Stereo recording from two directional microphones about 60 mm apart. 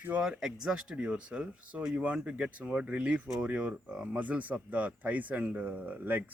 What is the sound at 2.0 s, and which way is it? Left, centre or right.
Speech, right.